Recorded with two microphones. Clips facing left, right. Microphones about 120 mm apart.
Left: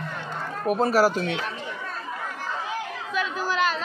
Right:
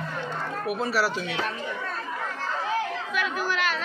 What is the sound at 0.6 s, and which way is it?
Speech, 40° left (ahead or behind).